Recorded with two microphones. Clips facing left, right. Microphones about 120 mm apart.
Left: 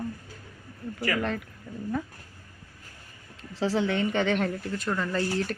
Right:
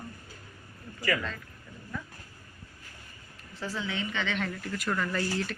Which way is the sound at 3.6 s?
75° left (ahead or behind).